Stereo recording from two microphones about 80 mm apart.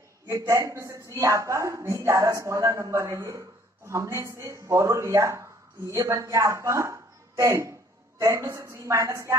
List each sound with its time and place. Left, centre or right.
0.5 s a woman's voice: right